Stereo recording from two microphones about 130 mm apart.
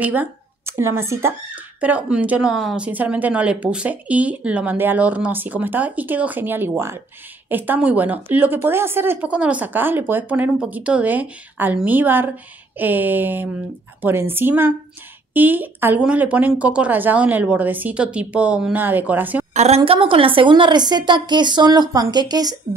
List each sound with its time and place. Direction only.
0.0 s speech: 10° right (ahead or behind)
19.5 s a woman's voice: 55° right (ahead or behind); by 22.8 s 30° right (ahead or behind)